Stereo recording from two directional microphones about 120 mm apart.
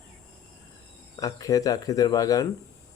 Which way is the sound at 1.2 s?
30° left (ahead or behind).